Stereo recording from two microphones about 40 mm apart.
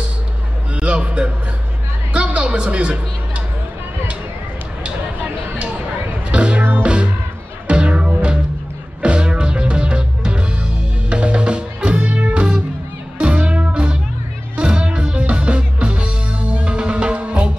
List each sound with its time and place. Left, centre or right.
0.7 s a sound: right
2.1 s music: right
6.3 s music: right